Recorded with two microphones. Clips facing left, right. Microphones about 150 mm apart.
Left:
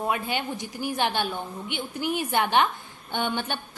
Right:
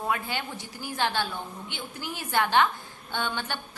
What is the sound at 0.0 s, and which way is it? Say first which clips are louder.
A woman's voice: left 3 dB; 20° left (ahead or behind).